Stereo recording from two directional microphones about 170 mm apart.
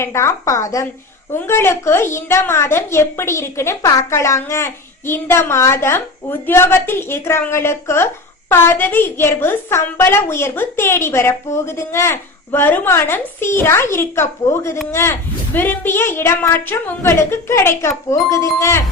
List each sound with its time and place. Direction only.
0.0 s a woman's voice: 15° left (ahead or behind)